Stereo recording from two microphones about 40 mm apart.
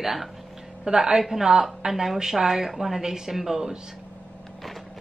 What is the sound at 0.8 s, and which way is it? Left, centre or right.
A woman's voice, centre.